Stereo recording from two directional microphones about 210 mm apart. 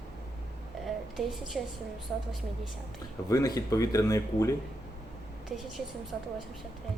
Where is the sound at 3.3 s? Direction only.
15° left (ahead or behind).